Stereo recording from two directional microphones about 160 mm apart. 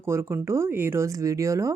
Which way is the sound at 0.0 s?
15° right (ahead or behind).